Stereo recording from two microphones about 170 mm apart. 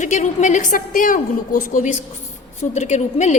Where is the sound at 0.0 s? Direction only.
45° left (ahead or behind).